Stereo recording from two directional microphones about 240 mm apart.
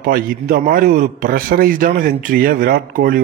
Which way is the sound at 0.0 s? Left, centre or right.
Right.